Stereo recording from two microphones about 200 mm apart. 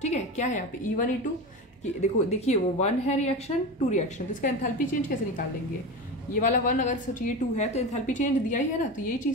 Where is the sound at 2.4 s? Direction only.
35° left (ahead or behind).